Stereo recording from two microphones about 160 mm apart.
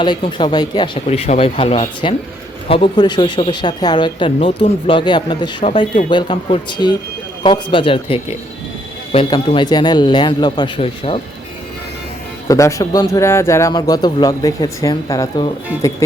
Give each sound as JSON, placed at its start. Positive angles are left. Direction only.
{"t": 0.0, "sound": "speech", "side_deg": 30}
{"t": 1.0, "sound": "speech", "side_deg": 40}
{"t": 12.5, "sound": "speech", "side_deg": 20}